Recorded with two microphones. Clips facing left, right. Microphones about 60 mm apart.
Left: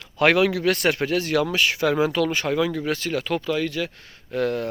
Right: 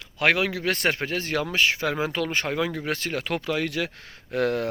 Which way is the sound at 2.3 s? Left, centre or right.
Right.